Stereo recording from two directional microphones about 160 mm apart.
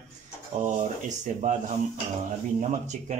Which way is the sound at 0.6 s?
50° right (ahead or behind).